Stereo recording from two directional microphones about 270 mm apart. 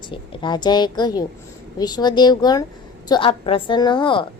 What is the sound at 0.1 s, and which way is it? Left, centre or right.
A woman's voice, centre.